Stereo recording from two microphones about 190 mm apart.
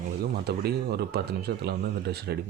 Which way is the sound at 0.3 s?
55° right (ahead or behind).